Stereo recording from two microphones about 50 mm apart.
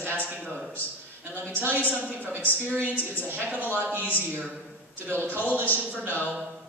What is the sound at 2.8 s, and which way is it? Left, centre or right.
Speech, left.